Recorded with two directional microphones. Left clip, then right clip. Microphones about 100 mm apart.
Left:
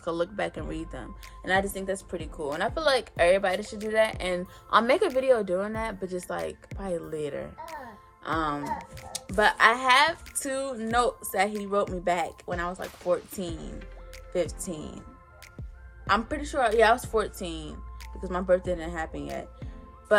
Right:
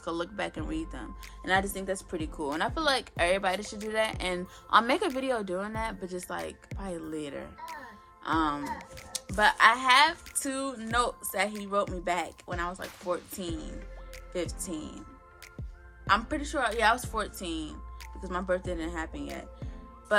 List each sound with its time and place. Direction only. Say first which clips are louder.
0.0 s a woman's voice: left 4 dB; 35° right (ahead or behind)
1.5 s speech: left 2 dB; 60° right (ahead or behind)
2.6 s a woman's voice: left 3 dB; 40° right (ahead or behind)
8.6 s speech: left 4 dB; centre (ahead or behind)
9.3 s speech: left 1 dB; 25° right (ahead or behind)
16.0 s speech: left 1 dB; 20° right (ahead or behind)